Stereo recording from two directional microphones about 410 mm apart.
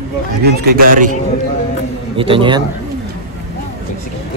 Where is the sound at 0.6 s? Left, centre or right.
Right.